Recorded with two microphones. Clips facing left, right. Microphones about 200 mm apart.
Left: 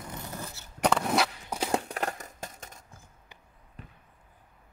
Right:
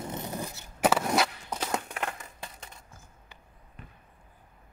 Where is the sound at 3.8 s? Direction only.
35° left (ahead or behind).